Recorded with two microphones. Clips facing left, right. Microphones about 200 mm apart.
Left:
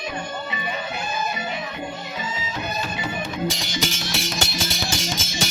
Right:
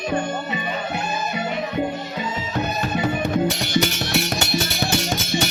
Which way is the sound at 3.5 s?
65° right (ahead or behind).